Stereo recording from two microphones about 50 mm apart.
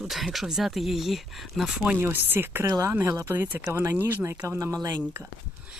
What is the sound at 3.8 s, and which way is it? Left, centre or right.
Speech, right.